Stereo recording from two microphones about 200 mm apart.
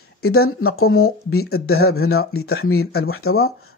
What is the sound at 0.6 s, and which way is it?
Speech, 90° left.